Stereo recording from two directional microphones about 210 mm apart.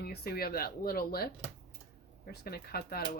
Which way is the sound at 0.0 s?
50° left (ahead or behind).